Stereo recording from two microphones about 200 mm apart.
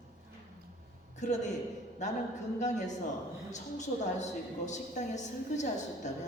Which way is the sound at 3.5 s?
35° left (ahead or behind).